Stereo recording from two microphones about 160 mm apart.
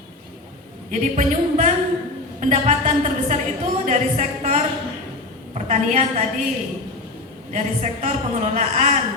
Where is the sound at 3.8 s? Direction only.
50° right (ahead or behind).